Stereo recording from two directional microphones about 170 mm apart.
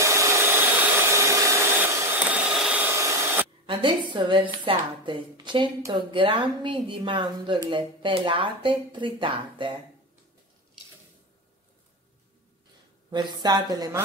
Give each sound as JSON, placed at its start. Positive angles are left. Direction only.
{"t": 0.0, "sound": "hair dryer", "side_deg": -15}
{"t": 0.9, "sound": "vacuum cleaner", "side_deg": -15}
{"t": 3.6, "sound": "a woman's voice", "side_deg": -30}
{"t": 13.4, "sound": "a woman's voice", "side_deg": -25}